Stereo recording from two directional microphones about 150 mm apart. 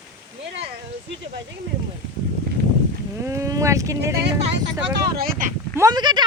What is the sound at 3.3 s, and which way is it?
Speech, 20° right (ahead or behind).